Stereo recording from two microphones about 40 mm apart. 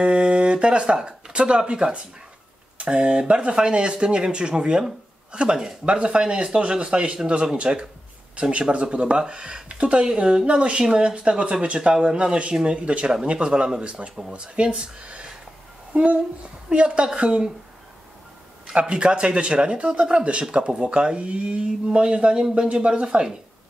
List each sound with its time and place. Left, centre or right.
0.0 s a woman's voice: right
18.7 s speech: right